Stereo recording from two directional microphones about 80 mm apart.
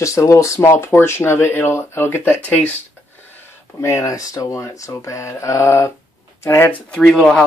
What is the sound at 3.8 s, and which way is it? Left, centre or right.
Speech, left.